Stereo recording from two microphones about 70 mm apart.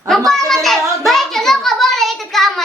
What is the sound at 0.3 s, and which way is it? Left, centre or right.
Child singing, centre.